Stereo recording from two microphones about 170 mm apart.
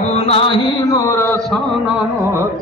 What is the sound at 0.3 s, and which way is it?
Mantra, 30° left (ahead or behind).